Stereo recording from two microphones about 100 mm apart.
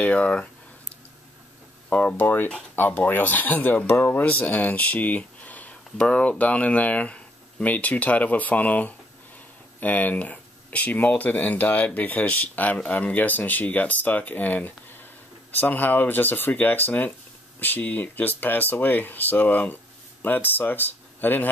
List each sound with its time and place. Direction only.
0.0 s speech: 10° left (ahead or behind)
1.9 s speech: 15° left (ahead or behind)